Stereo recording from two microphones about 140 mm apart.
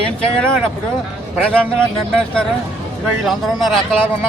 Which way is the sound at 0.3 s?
5° left (ahead or behind).